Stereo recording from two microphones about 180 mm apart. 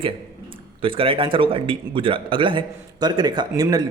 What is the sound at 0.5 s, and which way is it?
A man's voice, 30° right (ahead or behind).